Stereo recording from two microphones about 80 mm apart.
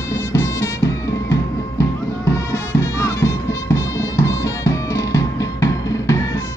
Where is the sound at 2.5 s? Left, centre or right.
Left.